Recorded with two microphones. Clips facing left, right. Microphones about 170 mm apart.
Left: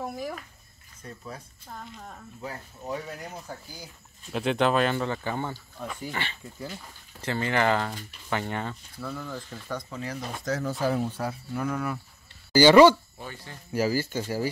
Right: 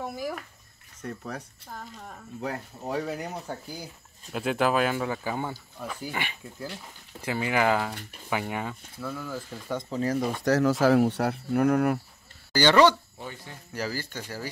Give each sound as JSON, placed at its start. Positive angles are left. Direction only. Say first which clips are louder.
{"t": 0.0, "sound": "a sound", "louder": "right 1 dB", "side_deg": 0}
{"t": 1.0, "sound": "speech", "louder": "right 5 dB", "side_deg": -70}
{"t": 2.0, "sound": "speech", "louder": "even", "side_deg": 0}
{"t": 2.9, "sound": "speech", "louder": "right 4 dB", "side_deg": -65}
{"t": 4.3, "sound": "speech", "louder": "left 1 dB", "side_deg": -5}
{"t": 9.7, "sound": "speech", "louder": "right 3 dB", "side_deg": -25}
{"t": 9.9, "sound": "speech", "louder": "right 8 dB", "side_deg": -45}
{"t": 10.4, "sound": "speech", "louder": "right 6 dB", "side_deg": -80}
{"t": 12.5, "sound": "speech", "louder": "left 4 dB", "side_deg": 5}
{"t": 13.2, "sound": "speech", "louder": "right 1 dB", "side_deg": -15}
{"t": 13.7, "sound": "speech", "louder": "left 7 dB", "side_deg": 10}